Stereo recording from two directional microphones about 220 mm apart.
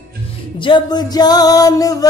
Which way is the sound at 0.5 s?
20° left (ahead or behind).